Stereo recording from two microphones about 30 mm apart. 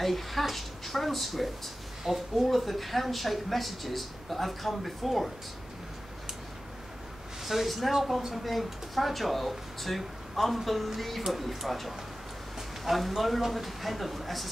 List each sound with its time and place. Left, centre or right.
0.0 s a woman's voice: centre
7.4 s a woman's voice: centre